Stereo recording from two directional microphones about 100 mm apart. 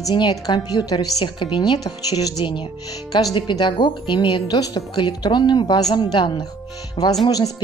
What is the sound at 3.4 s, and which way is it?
A woman's voice, 50° left (ahead or behind).